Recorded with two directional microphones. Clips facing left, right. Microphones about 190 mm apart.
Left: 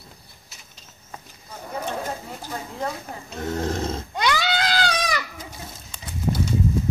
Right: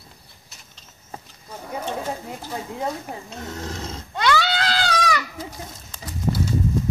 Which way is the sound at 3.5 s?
50° left (ahead or behind).